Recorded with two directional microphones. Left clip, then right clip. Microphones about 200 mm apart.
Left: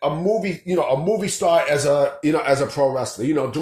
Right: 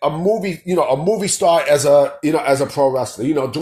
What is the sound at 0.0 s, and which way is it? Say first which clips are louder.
Speech: right 3 dB; 30° right (ahead or behind).